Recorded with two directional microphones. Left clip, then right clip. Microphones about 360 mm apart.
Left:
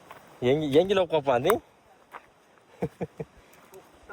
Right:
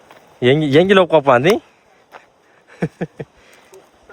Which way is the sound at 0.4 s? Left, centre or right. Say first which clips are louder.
Right 10 dB; right.